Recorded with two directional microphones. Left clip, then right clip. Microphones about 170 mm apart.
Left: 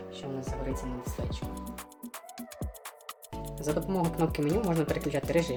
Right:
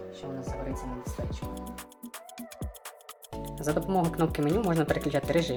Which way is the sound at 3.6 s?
Centre (ahead or behind).